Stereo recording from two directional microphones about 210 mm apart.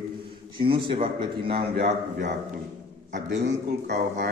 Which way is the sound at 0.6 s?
25° right (ahead or behind).